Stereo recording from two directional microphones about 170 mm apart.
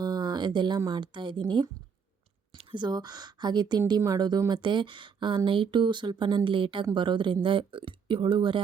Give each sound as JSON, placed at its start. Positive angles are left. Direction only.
{"t": 0.0, "sound": "a woman's voice", "side_deg": -25}